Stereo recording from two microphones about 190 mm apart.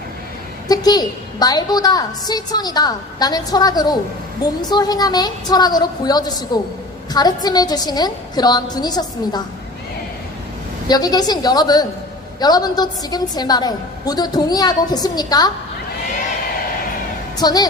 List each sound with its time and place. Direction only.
0.7 s a woman's voice: 20° left (ahead or behind)
10.8 s a woman's voice: 20° left (ahead or behind)
17.3 s a woman's voice: 20° left (ahead or behind)